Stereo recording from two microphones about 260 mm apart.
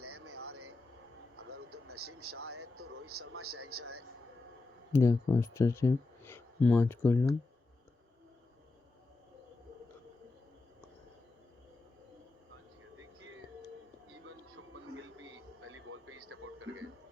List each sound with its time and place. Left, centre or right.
0.0 s vehicle: right
4.9 s speech: centre
15.2 s a sound: right